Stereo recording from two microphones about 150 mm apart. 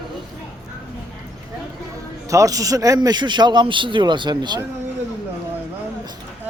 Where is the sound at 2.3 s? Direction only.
20° right (ahead or behind).